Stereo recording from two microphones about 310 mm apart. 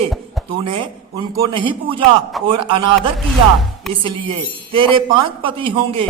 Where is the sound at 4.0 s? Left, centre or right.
Centre.